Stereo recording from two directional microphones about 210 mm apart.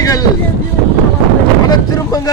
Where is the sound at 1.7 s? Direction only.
15° left (ahead or behind).